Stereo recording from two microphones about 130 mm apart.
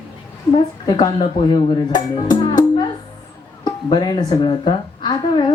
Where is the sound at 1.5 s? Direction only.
35° left (ahead or behind).